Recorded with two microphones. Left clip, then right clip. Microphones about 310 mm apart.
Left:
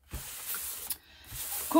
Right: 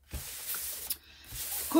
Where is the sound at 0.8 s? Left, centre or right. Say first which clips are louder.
Right 2 dB; left.